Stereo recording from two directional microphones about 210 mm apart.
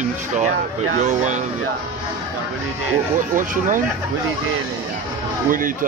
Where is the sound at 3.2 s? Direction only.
40° right (ahead or behind).